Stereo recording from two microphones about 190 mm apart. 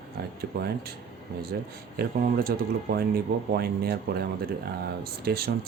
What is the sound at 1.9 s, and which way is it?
Speech, 50° right (ahead or behind).